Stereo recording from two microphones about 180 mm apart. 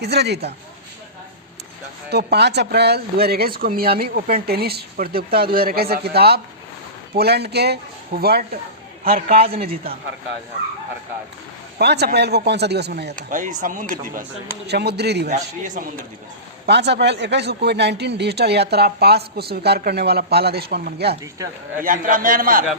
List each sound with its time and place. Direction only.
0.0 s speech: 65° right (ahead or behind)
2.0 s a man's voice: 65° right (ahead or behind)
9.3 s a man's voice: 35° right (ahead or behind)
11.8 s speech: 65° right (ahead or behind)
13.3 s speech: 45° right (ahead or behind)
14.7 s speech: 65° right (ahead or behind)
16.6 s a man's voice: 70° right (ahead or behind)
21.3 s speech: 20° right (ahead or behind)
21.8 s speech: 50° right (ahead or behind)